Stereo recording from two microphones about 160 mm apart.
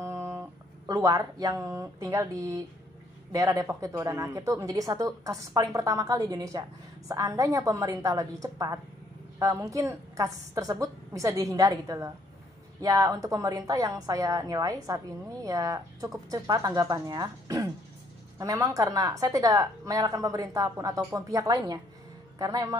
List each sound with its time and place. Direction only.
0.0 s guitar: 15° right (ahead or behind)
0.8 s speech: 20° right (ahead or behind)